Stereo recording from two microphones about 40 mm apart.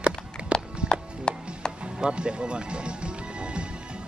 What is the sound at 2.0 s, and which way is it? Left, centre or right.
Music, right.